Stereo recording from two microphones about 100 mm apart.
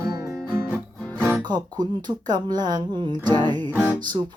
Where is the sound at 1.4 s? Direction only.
45° right (ahead or behind).